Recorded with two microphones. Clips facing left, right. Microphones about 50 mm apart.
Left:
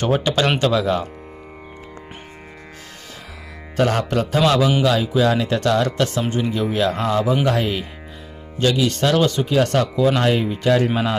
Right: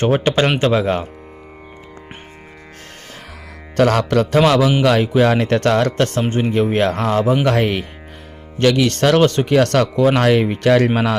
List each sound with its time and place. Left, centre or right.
0.0 s speech: right
3.8 s speech: right
4.8 s speech: right
7.4 s speech: right
9.5 s speech: right